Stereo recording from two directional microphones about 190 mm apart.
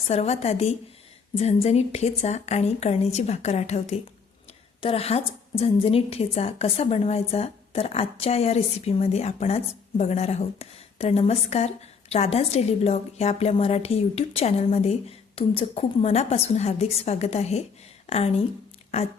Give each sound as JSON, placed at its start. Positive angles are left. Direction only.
{"t": 0.1, "sound": "a woman's voice", "side_deg": 35}